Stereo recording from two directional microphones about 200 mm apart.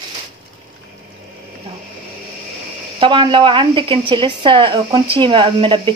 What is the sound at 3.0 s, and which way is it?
Speech, 25° right (ahead or behind).